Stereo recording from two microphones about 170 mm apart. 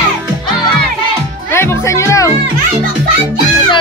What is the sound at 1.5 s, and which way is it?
Music, 15° left (ahead or behind).